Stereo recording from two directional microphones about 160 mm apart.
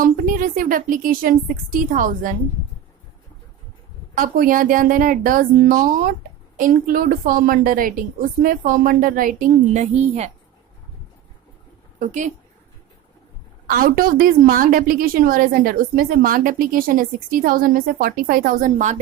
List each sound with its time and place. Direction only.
0.0 s a woman's voice: 60° right (ahead or behind)
4.2 s a woman's voice: 60° right (ahead or behind); by 10.3 s 40° right (ahead or behind)
11.9 s speech: 50° right (ahead or behind)
13.7 s a woman's voice: 65° right (ahead or behind)